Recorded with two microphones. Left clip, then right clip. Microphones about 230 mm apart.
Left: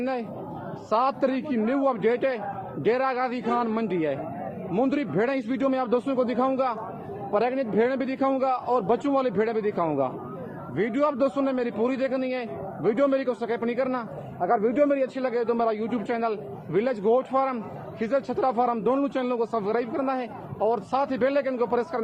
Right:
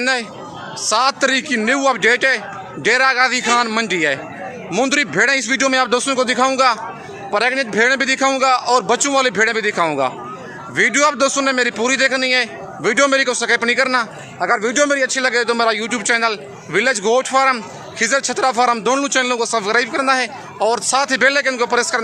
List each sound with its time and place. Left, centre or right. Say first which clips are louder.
0.0 s a man's voice: right 11 dB; centre